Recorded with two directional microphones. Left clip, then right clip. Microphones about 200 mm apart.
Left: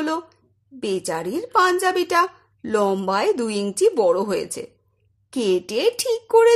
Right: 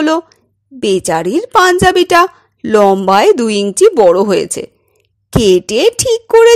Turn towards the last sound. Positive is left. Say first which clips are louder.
# right 9 dB
turn(degrees=-30)  # may be behind; listen again after turning